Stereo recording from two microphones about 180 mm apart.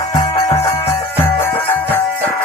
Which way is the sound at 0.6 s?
35° left (ahead or behind).